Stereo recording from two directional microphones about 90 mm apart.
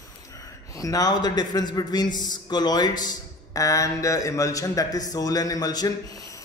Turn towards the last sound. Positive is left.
turn(degrees=40)  # may be behind; listen again after turning